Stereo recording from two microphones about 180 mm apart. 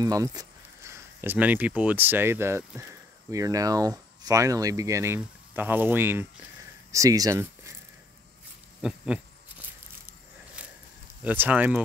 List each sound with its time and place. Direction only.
0.0 s speech: 20° right (ahead or behind)
8.8 s a sound: 5° right (ahead or behind)
11.2 s speech: 10° right (ahead or behind)